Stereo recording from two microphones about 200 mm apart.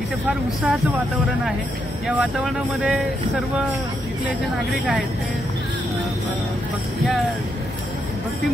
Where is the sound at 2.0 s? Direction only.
Centre (ahead or behind).